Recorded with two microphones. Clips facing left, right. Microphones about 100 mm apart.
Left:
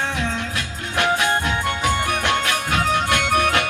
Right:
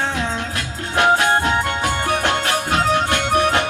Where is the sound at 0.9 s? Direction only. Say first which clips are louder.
Right 4 dB; 35° right (ahead or behind).